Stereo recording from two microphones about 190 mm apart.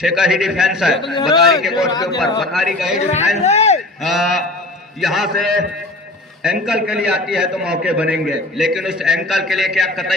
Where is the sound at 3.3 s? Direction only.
35° left (ahead or behind).